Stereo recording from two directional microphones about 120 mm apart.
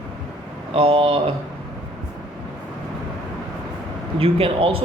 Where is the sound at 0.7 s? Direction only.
45° right (ahead or behind).